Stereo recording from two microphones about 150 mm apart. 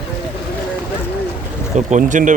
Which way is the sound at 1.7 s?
55° right (ahead or behind).